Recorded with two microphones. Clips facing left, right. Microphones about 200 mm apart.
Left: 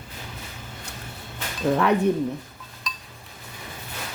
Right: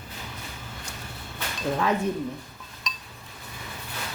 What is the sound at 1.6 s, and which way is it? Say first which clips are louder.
Speech: left 5 dB; 70° left (ahead or behind).